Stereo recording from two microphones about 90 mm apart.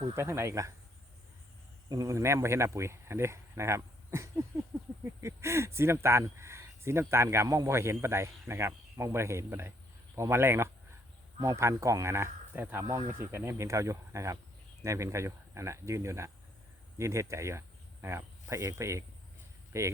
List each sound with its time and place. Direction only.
0.2 s speech: 30° right (ahead or behind)
1.9 s speech: 40° right (ahead or behind)
4.7 s speech: 20° right (ahead or behind)
5.2 s speech: 30° right (ahead or behind)